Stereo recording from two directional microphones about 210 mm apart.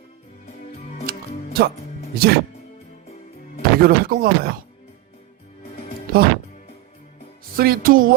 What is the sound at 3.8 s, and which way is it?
Speech, 45° right (ahead or behind).